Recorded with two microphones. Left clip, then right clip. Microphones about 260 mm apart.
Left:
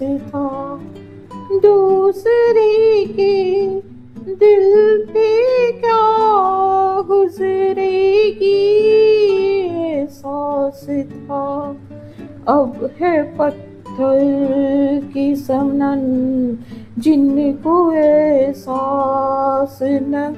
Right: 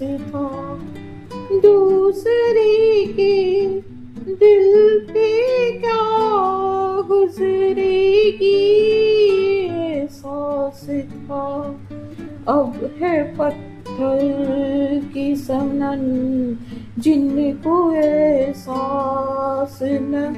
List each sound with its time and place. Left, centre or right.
0.3 s music: left
1.6 s child singing: left
10.5 s music: left
13.0 s music: left
17.0 s music: left